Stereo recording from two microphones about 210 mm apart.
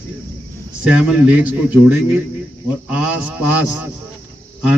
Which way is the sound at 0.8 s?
5° right (ahead or behind).